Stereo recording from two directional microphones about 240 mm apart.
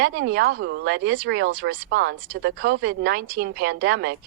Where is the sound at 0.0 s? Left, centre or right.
Right.